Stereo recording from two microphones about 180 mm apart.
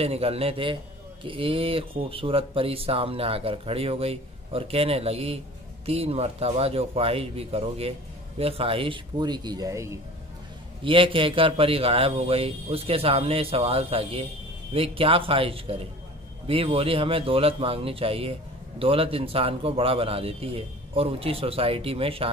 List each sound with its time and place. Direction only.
0.0 s speech: 35° right (ahead or behind); by 9.9 s 15° right (ahead or behind)
10.8 s speech: 30° right (ahead or behind)